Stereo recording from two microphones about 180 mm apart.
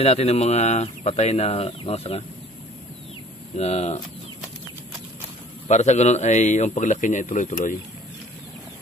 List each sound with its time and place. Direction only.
0.0 s speech: 35° left (ahead or behind)
3.5 s speech: 35° left (ahead or behind)
5.7 s speech: 40° left (ahead or behind)